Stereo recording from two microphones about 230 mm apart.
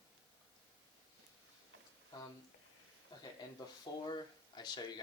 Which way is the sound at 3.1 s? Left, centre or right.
Centre.